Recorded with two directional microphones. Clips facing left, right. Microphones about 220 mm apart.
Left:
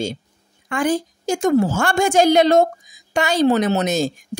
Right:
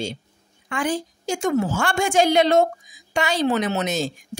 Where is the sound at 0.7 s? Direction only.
45° left (ahead or behind).